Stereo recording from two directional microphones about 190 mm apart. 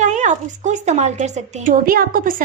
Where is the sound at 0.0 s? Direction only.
40° right (ahead or behind).